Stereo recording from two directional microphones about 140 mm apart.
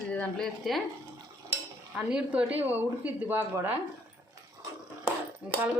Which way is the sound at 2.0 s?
5° right (ahead or behind).